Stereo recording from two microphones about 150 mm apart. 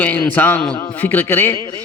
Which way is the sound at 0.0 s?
10° left (ahead or behind).